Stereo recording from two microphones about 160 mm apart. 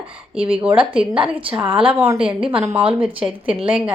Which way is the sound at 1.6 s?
35° right (ahead or behind).